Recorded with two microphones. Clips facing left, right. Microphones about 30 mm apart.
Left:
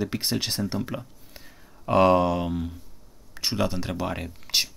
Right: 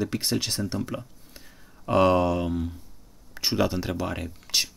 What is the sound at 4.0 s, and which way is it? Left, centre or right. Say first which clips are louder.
Speech: left 1 dB; centre.